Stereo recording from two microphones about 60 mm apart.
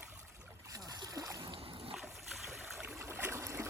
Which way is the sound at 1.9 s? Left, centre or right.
Centre.